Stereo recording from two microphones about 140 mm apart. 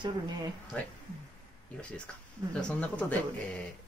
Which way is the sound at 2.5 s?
5° left (ahead or behind).